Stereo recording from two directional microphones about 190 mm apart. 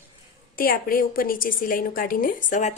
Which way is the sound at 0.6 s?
50° left (ahead or behind).